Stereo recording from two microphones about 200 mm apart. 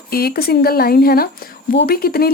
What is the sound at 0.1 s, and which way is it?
Speech, 50° left (ahead or behind).